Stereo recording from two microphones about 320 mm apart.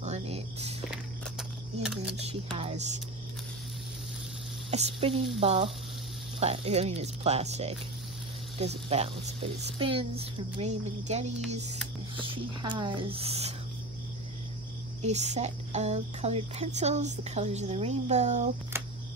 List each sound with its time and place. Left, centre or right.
0.0 s music: centre
2.2 s speech: centre
4.6 s speech: centre
15.0 s speech: right